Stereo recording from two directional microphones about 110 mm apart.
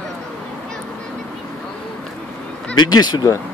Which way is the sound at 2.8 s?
40° left (ahead or behind).